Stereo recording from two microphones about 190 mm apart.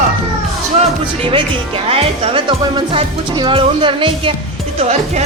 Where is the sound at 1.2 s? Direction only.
30° right (ahead or behind).